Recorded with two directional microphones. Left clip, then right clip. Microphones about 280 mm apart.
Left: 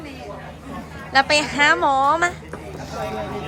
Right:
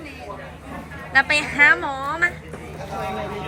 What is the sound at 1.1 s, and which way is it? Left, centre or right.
A woman's voice, centre.